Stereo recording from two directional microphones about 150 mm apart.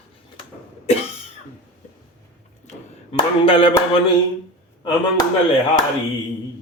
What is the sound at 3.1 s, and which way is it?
Speech, 35° left (ahead or behind).